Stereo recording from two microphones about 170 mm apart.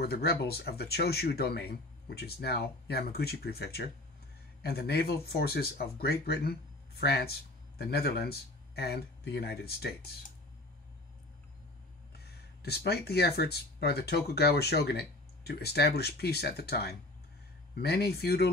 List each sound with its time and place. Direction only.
0.0 s speech: 65° left (ahead or behind)
12.1 s speech: 70° left (ahead or behind)